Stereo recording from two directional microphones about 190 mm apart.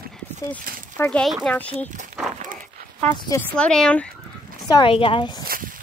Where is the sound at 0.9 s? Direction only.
10° left (ahead or behind).